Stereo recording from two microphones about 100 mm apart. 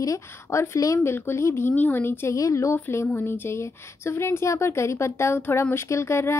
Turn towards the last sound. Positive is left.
turn(degrees=25)  # may be behind; listen again after turning